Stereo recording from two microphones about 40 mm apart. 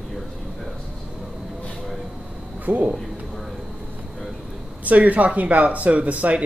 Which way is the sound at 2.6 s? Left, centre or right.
Right.